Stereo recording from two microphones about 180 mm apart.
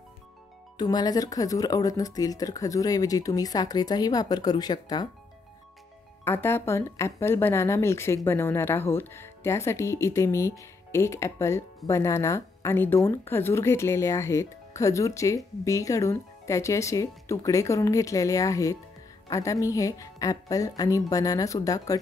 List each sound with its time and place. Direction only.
0.7 s speech: 20° left (ahead or behind)
6.2 s speech: 10° left (ahead or behind)